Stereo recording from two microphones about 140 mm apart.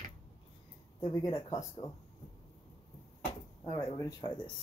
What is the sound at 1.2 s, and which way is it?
Speech, 30° left (ahead or behind).